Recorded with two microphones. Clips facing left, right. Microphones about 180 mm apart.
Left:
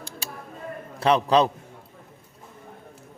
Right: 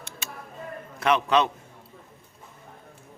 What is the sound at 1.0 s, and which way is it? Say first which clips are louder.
Speech: left 3 dB; 30° left (ahead or behind).